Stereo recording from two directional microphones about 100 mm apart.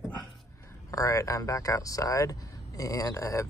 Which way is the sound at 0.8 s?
35° left (ahead or behind).